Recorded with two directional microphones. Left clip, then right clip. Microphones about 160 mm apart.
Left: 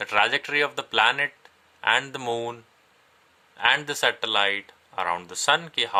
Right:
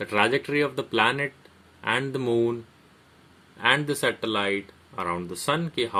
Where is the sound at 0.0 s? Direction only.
35° left (ahead or behind).